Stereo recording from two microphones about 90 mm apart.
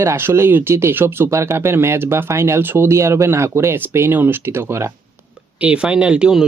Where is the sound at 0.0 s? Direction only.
30° right (ahead or behind).